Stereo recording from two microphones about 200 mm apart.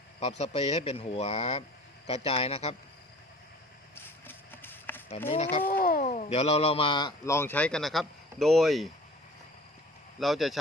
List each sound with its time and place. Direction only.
0.2 s speech: 30° left (ahead or behind)
3.9 s run: 10° left (ahead or behind)
5.3 s speech: 30° left (ahead or behind)
5.6 s speech: 45° left (ahead or behind); by 8.9 s centre (ahead or behind)
10.2 s speech: centre (ahead or behind)